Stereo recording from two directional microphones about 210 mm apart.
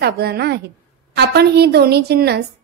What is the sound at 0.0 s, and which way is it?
A woman's voice, 50° right (ahead or behind).